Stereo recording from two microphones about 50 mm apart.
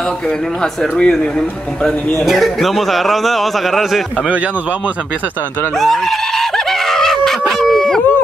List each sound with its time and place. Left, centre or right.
0.6 s speech: centre
2.2 s speech: centre
5.8 s a sound: centre